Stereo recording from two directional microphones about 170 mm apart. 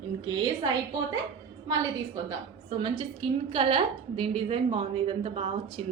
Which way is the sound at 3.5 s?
30° right (ahead or behind).